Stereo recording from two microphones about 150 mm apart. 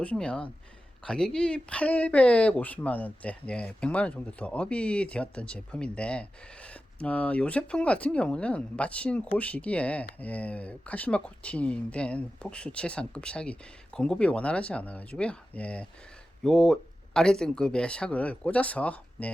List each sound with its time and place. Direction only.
0.0 s speech: 5° left (ahead or behind)